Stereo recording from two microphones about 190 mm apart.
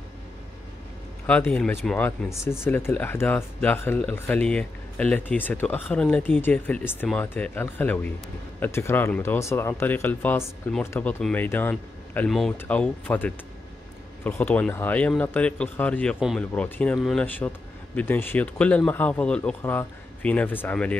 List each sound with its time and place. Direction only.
1.2 s speech: 10° left (ahead or behind)